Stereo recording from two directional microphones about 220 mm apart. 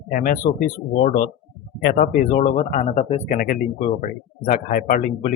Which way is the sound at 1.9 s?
25° left (ahead or behind).